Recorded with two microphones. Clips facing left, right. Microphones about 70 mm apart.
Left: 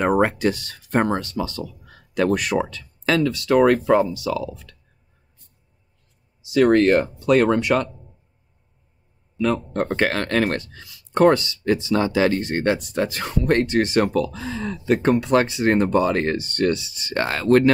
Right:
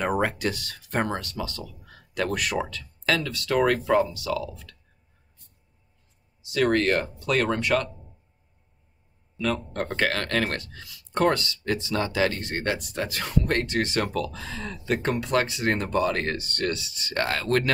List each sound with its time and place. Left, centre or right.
0.0 s speech: left
6.5 s speech: left
9.4 s speech: centre